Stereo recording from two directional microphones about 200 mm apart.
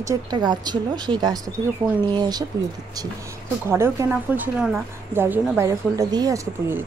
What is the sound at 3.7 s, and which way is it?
A woman's voice, 15° right (ahead or behind).